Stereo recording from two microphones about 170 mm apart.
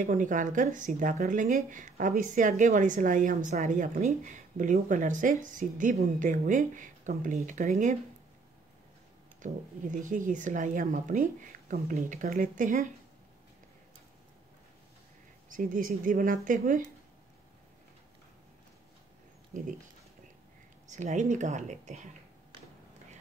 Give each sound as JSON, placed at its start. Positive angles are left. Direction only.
{"t": 0.0, "sound": "speech", "side_deg": -50}
{"t": 9.4, "sound": "speech", "side_deg": -50}
{"t": 15.5, "sound": "speech", "side_deg": -55}
{"t": 20.8, "sound": "speech", "side_deg": -45}